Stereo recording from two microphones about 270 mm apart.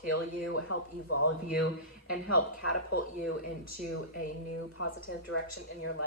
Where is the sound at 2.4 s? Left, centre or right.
Left.